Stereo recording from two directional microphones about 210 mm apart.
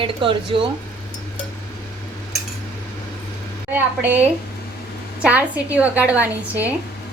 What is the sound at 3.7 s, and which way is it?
A woman's voice, 10° right (ahead or behind).